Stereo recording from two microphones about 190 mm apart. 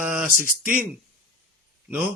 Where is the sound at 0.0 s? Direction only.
5° right (ahead or behind).